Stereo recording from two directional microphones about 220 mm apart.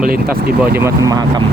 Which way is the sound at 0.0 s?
40° right (ahead or behind).